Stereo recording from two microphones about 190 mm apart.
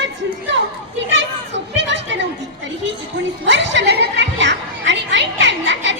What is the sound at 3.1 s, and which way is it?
Speech, 70° right (ahead or behind).